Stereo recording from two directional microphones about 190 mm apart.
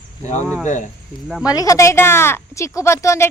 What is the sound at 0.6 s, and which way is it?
Speech, 40° left (ahead or behind).